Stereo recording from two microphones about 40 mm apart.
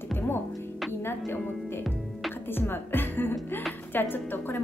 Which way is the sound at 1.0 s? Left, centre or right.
Left.